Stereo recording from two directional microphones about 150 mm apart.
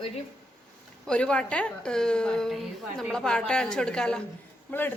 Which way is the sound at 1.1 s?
5° left (ahead or behind).